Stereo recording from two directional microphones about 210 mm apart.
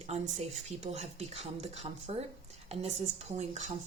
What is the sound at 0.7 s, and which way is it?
Speech, 30° right (ahead or behind).